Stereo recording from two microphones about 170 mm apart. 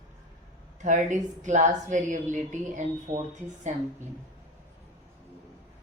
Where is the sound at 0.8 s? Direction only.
45° right (ahead or behind).